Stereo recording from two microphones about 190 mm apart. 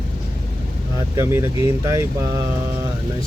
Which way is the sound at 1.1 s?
15° right (ahead or behind).